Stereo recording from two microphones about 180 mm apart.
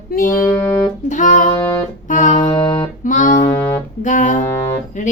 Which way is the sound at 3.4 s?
10° left (ahead or behind).